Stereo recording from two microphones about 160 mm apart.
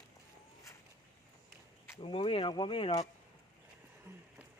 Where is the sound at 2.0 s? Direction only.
35° left (ahead or behind).